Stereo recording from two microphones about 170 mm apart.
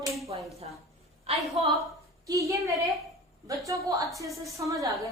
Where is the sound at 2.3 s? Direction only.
20° right (ahead or behind).